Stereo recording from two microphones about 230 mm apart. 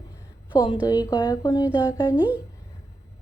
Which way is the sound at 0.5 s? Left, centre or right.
Centre.